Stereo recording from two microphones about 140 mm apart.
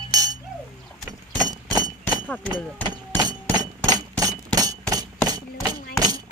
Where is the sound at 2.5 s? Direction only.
30° right (ahead or behind).